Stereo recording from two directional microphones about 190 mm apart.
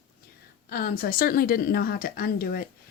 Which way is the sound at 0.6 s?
55° left (ahead or behind).